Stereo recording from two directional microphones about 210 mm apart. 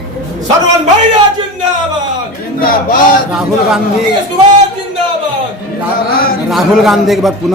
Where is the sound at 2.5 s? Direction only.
40° left (ahead or behind).